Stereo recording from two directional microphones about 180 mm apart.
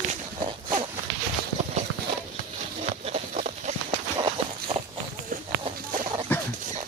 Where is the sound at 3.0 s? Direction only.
40° right (ahead or behind).